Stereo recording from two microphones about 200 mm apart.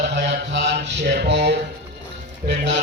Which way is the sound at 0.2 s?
65° right (ahead or behind).